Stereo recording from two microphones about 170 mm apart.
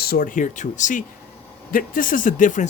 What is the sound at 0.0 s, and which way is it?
Speech, 60° left (ahead or behind).